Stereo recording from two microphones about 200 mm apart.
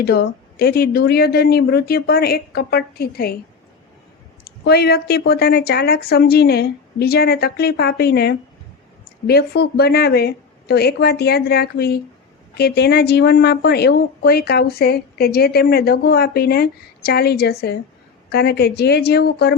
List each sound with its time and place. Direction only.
0.0 s speech: 50° left (ahead or behind)
4.4 s speech: 50° left (ahead or behind)